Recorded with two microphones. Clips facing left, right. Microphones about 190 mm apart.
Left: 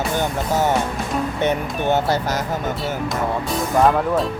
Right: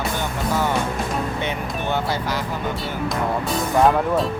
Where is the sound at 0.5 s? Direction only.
40° left (ahead or behind).